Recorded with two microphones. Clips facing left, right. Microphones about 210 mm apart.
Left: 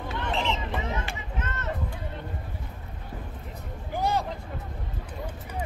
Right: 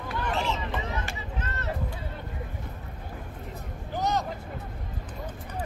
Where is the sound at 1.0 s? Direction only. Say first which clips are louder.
Left 1 dB; 35° right (ahead or behind).